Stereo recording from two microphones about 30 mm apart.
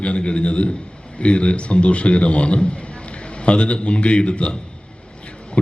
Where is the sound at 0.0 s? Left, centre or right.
Left.